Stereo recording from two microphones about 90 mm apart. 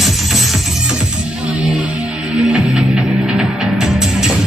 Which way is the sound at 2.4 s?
10° right (ahead or behind).